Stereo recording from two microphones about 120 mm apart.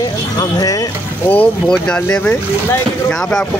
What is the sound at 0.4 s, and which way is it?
Speech, 30° left (ahead or behind).